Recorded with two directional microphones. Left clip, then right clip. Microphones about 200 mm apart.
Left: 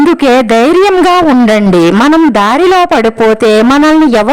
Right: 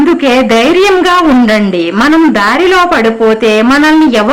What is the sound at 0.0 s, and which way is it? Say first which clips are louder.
Speech: left 1 dB; 50° left (ahead or behind).